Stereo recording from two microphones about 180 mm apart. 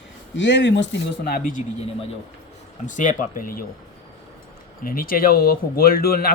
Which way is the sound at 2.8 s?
45° left (ahead or behind).